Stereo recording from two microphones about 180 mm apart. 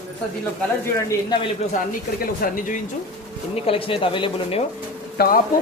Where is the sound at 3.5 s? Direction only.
30° left (ahead or behind).